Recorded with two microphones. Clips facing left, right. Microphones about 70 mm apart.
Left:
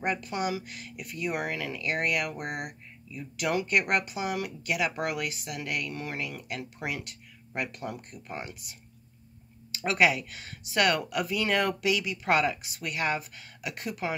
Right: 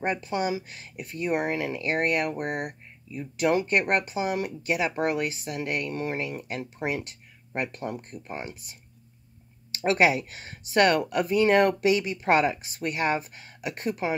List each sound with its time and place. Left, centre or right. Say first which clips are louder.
0.0 s speech: right 3 dB; right
9.8 s speech: right 3 dB; right